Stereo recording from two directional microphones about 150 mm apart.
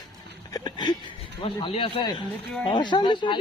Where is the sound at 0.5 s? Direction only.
30° left (ahead or behind).